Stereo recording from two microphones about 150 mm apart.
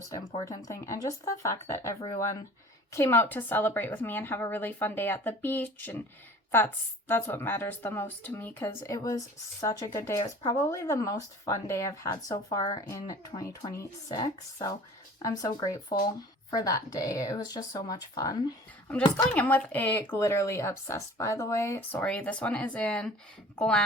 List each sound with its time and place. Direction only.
0.0 s a woman's voice: 20° left (ahead or behind)
19.1 s speech: 10° left (ahead or behind)